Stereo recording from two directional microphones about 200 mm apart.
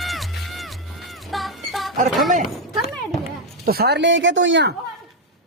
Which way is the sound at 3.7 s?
50° right (ahead or behind).